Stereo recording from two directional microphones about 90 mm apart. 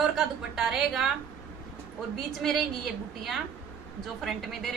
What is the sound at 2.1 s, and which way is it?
A woman's voice, 5° left (ahead or behind).